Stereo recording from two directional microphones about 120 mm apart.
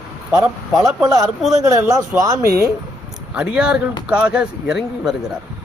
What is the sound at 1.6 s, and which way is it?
Speech, 30° right (ahead or behind).